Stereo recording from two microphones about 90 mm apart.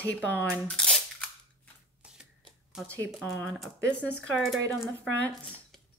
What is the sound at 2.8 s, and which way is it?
Speech, 15° left (ahead or behind).